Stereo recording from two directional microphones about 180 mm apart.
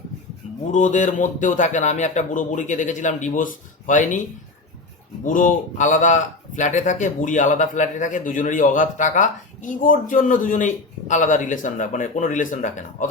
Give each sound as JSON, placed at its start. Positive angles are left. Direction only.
{"t": 0.7, "sound": "speech", "side_deg": 45}
{"t": 5.2, "sound": "speech", "side_deg": 45}